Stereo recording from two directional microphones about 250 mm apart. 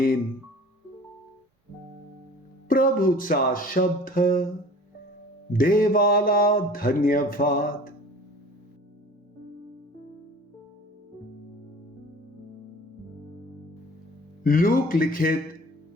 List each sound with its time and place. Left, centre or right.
2.6 s mantra: left
5.5 s mantra: left
14.4 s mantra: left